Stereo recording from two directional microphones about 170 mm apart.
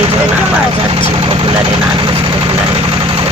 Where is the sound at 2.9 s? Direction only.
30° right (ahead or behind).